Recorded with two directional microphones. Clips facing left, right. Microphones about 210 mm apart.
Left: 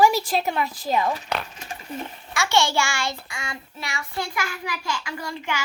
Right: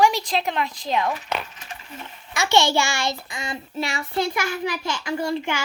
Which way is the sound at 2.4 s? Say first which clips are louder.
Right 2 dB; 20° right (ahead or behind).